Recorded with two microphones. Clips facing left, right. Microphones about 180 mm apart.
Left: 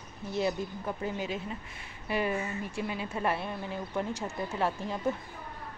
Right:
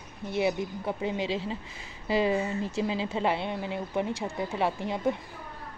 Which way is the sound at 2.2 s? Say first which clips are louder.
Right 5 dB; 25° right (ahead or behind).